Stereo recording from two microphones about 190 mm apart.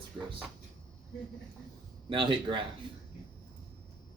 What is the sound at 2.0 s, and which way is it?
Speech, 25° right (ahead or behind).